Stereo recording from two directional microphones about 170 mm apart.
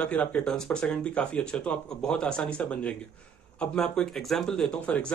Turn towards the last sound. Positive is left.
turn(degrees=5)  # may be behind; listen again after turning